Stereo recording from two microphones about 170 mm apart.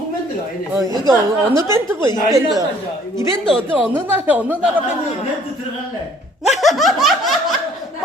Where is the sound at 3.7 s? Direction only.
10° right (ahead or behind).